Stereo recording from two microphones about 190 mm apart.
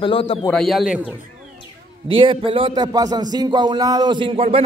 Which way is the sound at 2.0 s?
25° right (ahead or behind).